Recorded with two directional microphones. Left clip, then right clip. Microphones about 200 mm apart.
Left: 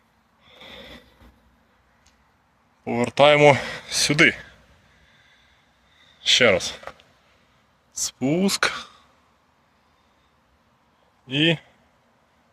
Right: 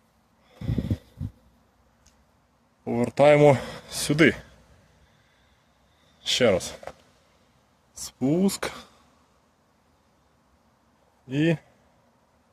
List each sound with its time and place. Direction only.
0.4 s a sound: 25° right (ahead or behind)
2.8 s speech: 10° right (ahead or behind)
6.2 s speech: 15° right (ahead or behind)
7.9 s speech: 10° right (ahead or behind)
11.3 s speech: 10° right (ahead or behind)